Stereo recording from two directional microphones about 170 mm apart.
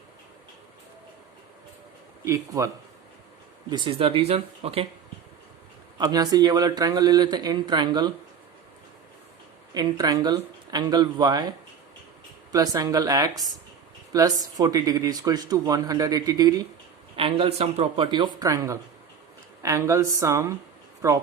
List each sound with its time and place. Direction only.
2.2 s speech: 20° right (ahead or behind)
3.7 s speech: 30° right (ahead or behind)
6.0 s speech: 25° right (ahead or behind)
9.7 s speech: 25° right (ahead or behind)
17.2 s speech: 35° right (ahead or behind); by 21.2 s 15° right (ahead or behind)